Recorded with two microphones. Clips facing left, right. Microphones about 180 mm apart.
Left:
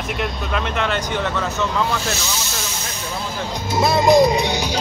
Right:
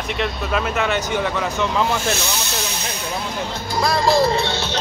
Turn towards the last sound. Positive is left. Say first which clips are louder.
# left 1 dB
turn(degrees=15)  # may be behind; listen again after turning